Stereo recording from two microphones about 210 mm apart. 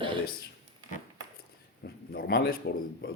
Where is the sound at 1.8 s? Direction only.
45° left (ahead or behind).